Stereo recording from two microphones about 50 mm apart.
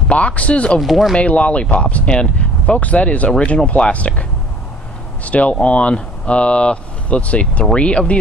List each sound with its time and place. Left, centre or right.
0.1 s speech: left
0.7 s speech: centre
1.1 s speech: left